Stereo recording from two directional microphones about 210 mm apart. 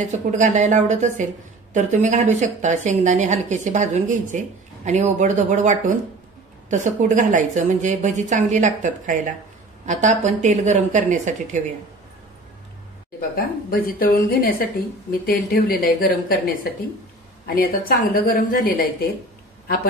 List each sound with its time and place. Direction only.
0.1 s a woman's voice: 35° right (ahead or behind)
13.7 s speech: 45° left (ahead or behind)